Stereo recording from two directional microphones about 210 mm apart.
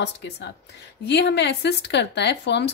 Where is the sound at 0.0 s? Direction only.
55° left (ahead or behind).